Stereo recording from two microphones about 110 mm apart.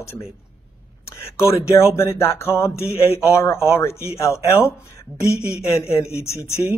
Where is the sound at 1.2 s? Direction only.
25° left (ahead or behind).